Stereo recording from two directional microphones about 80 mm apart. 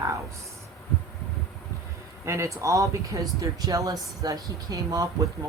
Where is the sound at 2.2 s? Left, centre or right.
Right.